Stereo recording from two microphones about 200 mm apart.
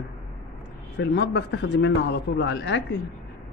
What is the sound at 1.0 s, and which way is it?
Speech, 60° left (ahead or behind).